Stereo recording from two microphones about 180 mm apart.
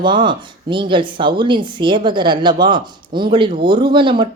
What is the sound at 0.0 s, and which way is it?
Speech, 25° right (ahead or behind).